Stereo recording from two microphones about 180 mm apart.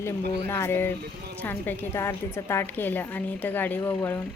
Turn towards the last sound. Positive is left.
turn(degrees=10)  # may be behind; listen again after turning